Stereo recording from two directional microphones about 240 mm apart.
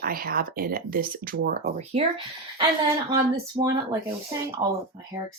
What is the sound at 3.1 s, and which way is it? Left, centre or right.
Speech, centre.